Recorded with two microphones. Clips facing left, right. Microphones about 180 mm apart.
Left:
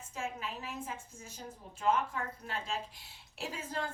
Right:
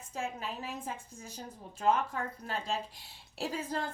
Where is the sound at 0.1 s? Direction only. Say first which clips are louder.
Right 2 dB; 35° right (ahead or behind).